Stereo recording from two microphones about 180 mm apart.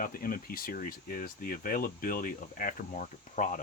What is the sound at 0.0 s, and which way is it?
Speech, 50° left (ahead or behind).